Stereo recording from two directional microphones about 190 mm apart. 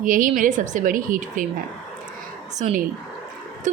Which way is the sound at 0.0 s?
45° right (ahead or behind).